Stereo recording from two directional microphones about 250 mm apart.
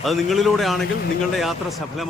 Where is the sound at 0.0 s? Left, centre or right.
Centre.